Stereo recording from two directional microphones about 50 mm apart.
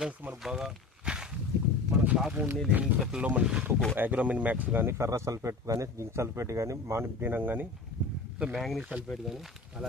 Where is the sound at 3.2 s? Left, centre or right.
Right.